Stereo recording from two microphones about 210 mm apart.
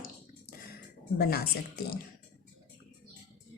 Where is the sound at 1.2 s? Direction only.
45° left (ahead or behind).